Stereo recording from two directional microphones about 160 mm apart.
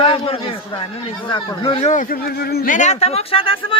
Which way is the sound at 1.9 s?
60° left (ahead or behind).